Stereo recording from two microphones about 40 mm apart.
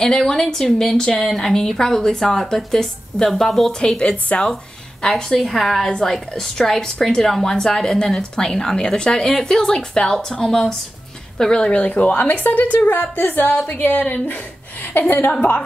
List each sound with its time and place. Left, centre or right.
0.0 s a woman's voice: centre
3.8 s a woman's voice: left
5.0 s a woman's voice: centre
11.7 s speech: left
12.7 s a woman's voice: left
14.8 s a woman's voice: left